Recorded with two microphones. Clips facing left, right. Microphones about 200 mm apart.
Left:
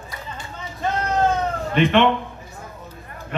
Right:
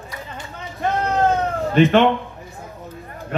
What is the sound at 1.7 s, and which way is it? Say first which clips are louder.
Speech: right 3 dB; 45° right (ahead or behind).